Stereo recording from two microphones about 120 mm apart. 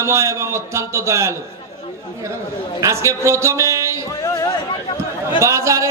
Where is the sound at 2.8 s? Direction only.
25° right (ahead or behind).